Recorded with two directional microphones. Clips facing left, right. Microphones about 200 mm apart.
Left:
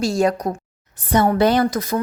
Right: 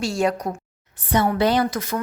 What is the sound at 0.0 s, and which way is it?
A woman's voice, 40° left (ahead or behind).